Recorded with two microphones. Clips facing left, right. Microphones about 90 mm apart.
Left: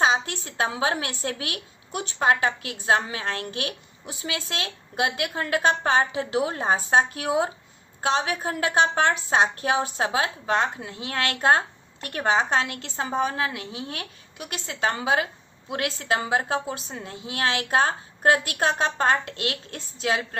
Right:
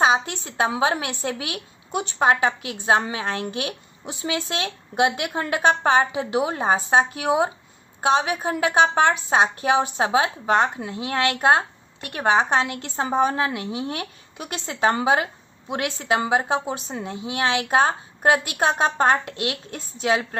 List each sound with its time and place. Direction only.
0.0 s a woman's voice: 20° right (ahead or behind)